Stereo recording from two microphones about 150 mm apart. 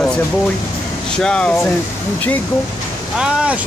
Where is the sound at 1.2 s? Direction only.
5° left (ahead or behind).